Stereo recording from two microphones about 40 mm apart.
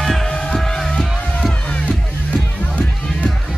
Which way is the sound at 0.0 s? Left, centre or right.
Centre.